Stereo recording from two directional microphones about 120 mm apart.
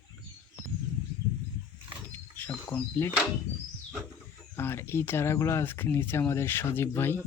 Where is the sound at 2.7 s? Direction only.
15° left (ahead or behind).